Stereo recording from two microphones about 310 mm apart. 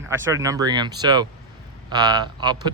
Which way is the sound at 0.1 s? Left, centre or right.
Centre.